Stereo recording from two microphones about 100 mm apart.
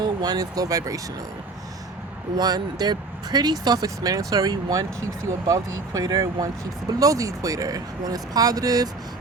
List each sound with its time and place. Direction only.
0.0 s speech: 40° right (ahead or behind)
2.4 s speech: 45° right (ahead or behind)